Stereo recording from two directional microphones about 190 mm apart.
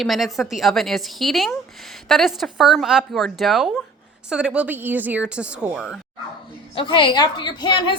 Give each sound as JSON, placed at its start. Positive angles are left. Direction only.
{"t": 0.0, "sound": "speech", "side_deg": 0}
{"t": 6.7, "sound": "a woman's voice", "side_deg": 25}